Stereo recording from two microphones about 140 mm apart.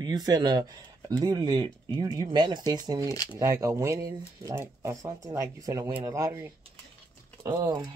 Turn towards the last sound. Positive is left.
turn(degrees=-35)  # may be behind; listen again after turning